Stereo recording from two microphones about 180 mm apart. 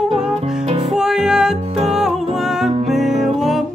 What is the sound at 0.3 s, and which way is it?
Music, 35° right (ahead or behind).